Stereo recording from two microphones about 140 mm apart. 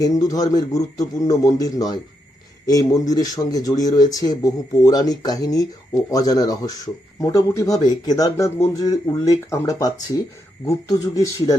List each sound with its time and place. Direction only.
0.0 s speech: 25° left (ahead or behind)